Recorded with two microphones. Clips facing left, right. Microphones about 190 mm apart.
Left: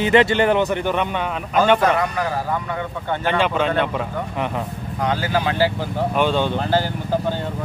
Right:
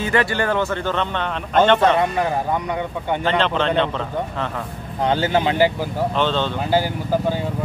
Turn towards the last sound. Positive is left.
turn(degrees=-10)  # may be behind; listen again after turning